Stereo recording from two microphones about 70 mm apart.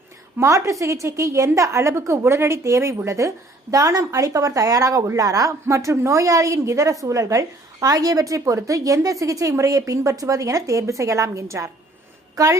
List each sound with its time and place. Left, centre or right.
0.3 s a woman's voice: right
12.4 s speech: right